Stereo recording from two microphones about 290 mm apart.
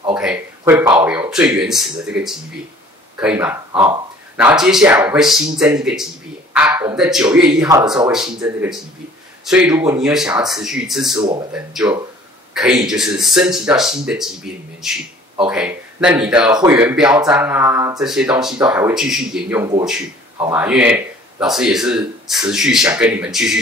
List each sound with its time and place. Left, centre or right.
0.1 s speech: centre
11.1 s speech: centre
11.5 s speech: centre